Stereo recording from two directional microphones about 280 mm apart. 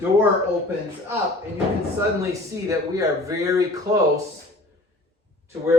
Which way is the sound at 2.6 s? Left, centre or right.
Centre.